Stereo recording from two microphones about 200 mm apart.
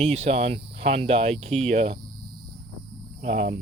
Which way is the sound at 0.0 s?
30° right (ahead or behind).